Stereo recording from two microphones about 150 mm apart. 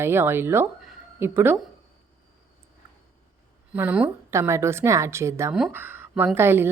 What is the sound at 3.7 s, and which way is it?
A woman's voice, 10° right (ahead or behind).